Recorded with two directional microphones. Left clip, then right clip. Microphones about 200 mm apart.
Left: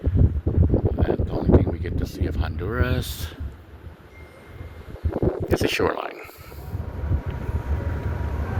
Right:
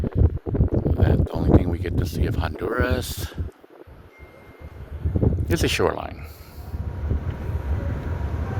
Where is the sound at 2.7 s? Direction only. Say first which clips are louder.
Even; 30° right (ahead or behind).